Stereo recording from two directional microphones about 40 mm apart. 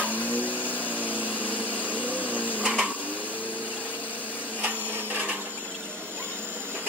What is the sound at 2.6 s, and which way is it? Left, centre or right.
Vacuum cleaner, centre.